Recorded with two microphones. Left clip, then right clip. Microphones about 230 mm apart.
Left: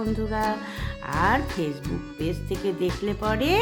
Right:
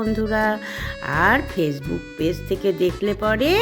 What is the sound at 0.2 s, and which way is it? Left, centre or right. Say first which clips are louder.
Speech: right 7 dB; centre.